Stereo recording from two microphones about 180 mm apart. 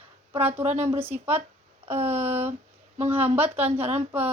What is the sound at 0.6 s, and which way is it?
Speech, 40° right (ahead or behind).